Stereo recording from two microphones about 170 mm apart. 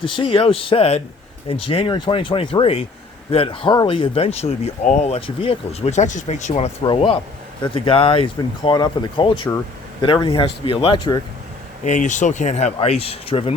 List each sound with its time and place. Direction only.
0.0 s speech: 30° left (ahead or behind)
6.8 s speech: 30° left (ahead or behind)
11.9 s speech: 45° left (ahead or behind)